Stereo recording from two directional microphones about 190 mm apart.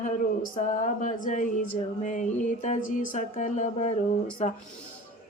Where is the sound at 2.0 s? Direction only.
40° left (ahead or behind).